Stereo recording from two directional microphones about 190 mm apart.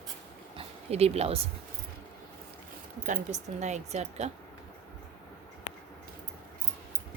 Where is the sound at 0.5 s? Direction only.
30° right (ahead or behind).